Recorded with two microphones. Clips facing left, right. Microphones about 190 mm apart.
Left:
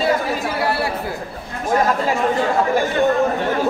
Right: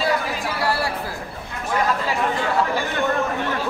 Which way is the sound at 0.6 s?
25° left (ahead or behind).